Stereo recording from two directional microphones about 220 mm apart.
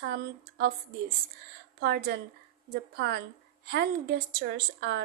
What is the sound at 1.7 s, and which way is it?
A woman's voice, 45° right (ahead or behind).